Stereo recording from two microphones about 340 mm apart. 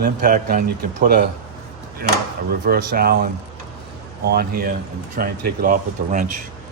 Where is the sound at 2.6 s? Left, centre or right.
Right.